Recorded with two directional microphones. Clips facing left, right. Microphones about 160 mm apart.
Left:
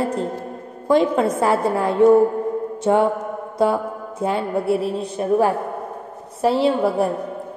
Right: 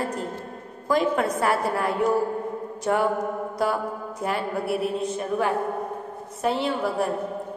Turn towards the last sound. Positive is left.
turn(degrees=30)  # may be behind; listen again after turning